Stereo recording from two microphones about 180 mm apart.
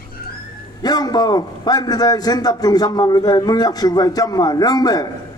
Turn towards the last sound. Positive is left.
turn(degrees=20)  # may be behind; listen again after turning